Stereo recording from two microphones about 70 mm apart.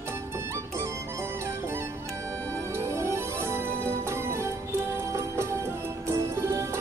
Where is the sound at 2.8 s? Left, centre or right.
Right.